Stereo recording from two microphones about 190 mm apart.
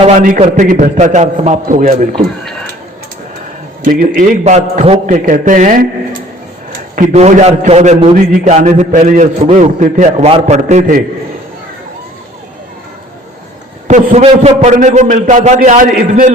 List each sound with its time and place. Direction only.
0.0 s a man's voice: 40° right (ahead or behind)
3.8 s a man's voice: 45° right (ahead or behind)
8.4 s a man's voice: 35° right (ahead or behind)
13.8 s a man's voice: 35° right (ahead or behind)